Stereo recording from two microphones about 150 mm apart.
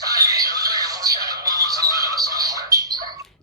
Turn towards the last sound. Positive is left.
turn(degrees=-25)  # may be behind; listen again after turning